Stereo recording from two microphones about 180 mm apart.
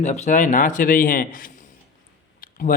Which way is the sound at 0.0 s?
40° left (ahead or behind).